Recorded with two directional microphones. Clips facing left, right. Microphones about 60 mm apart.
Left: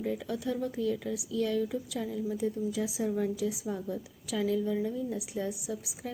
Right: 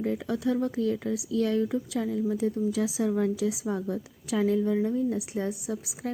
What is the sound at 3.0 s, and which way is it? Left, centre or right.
A woman's voice, right.